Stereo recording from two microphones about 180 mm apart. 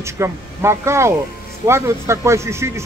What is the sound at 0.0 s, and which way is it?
Speech, 15° right (ahead or behind).